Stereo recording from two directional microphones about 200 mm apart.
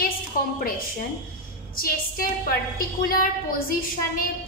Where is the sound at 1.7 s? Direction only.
45° left (ahead or behind).